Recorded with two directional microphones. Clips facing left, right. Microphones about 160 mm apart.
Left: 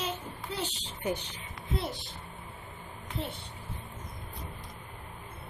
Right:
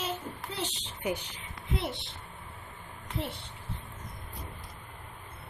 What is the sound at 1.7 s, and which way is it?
Speech, 20° right (ahead or behind).